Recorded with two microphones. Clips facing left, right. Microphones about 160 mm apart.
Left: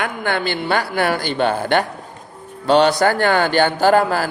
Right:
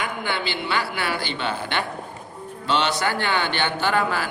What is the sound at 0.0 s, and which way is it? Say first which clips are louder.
A man's voice: left 6 dB; 50° left (ahead or behind).